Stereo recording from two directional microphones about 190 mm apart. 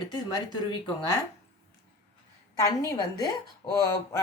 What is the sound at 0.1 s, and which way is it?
A woman's voice, 20° left (ahead or behind).